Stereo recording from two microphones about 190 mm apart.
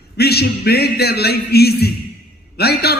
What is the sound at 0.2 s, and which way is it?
A man's voice, 55° left (ahead or behind).